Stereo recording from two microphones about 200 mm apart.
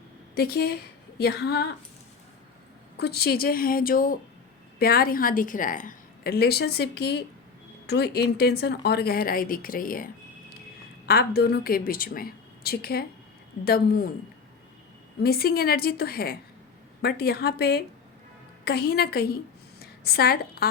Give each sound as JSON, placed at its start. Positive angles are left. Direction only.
{"t": 0.3, "sound": "a woman's voice", "side_deg": 50}
{"t": 3.0, "sound": "a woman's voice", "side_deg": 50}
{"t": 11.1, "sound": "a woman's voice", "side_deg": 50}
{"t": 15.2, "sound": "a woman's voice", "side_deg": 50}